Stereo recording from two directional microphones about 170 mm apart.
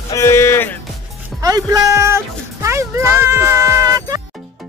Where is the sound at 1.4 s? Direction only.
20° right (ahead or behind).